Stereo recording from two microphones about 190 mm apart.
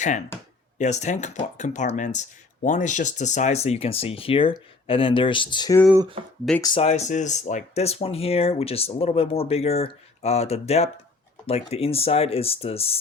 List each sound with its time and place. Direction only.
0.8 s speech: 40° left (ahead or behind); by 6.8 s 20° left (ahead or behind)
6.8 s speech: 35° left (ahead or behind)